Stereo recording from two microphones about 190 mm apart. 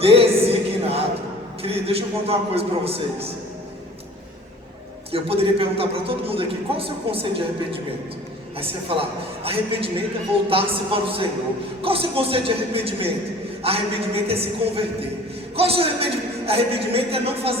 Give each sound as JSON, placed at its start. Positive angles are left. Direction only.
{"t": 0.0, "sound": "a sound", "side_deg": -30}
{"t": 1.6, "sound": "a man's voice", "side_deg": -30}
{"t": 5.1, "sound": "a man's voice", "side_deg": -30}